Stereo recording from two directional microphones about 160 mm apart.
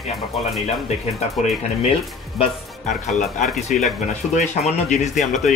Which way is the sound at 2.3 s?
Centre (ahead or behind).